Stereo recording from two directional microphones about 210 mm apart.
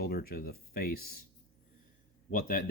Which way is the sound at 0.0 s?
45° left (ahead or behind).